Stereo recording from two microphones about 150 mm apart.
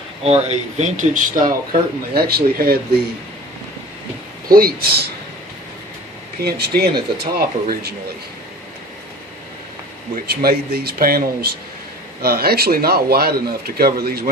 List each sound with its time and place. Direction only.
0.2 s speech: 45° right (ahead or behind); by 1.5 s 60° right (ahead or behind)
2.1 s speech: 90° right
4.4 s speech: 80° right
6.4 s speech: 90° right
10.2 s speech: 90° right